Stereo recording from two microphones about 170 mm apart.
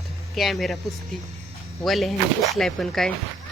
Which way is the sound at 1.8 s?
Centre (ahead or behind).